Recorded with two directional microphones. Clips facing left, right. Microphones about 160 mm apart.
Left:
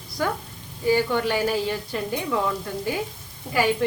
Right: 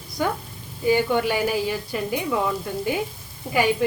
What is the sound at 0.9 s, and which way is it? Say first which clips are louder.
A woman's voice: right 1 dB; 15° right (ahead or behind).